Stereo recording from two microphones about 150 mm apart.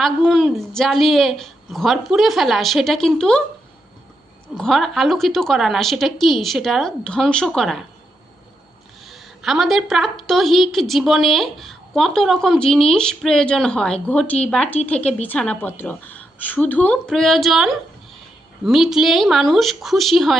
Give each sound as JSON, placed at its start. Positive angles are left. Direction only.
{"t": 0.0, "sound": "a woman's voice", "side_deg": 0}
{"t": 4.5, "sound": "a woman's voice", "side_deg": 5}
{"t": 9.0, "sound": "a woman's voice", "side_deg": 0}